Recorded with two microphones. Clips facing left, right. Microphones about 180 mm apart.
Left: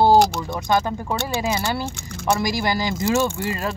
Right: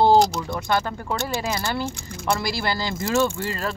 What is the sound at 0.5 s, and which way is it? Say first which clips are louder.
Speech: left 3 dB; 15° left (ahead or behind).